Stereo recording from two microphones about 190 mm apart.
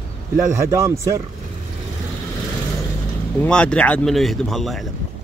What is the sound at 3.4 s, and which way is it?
Speech, 5° left (ahead or behind).